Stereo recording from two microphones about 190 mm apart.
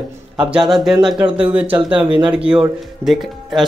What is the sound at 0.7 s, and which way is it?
Speech, centre (ahead or behind).